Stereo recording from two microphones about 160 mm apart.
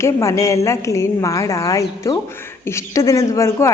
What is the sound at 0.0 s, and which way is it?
A woman's voice, 20° left (ahead or behind).